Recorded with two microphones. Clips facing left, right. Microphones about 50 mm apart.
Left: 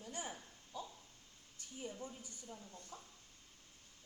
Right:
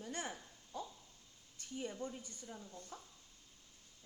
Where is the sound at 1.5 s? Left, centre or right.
Right.